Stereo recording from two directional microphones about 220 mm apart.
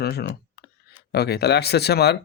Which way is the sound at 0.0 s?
45° left (ahead or behind).